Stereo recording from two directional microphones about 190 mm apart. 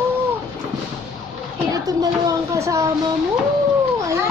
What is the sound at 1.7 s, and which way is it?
A woman's voice, 20° right (ahead or behind).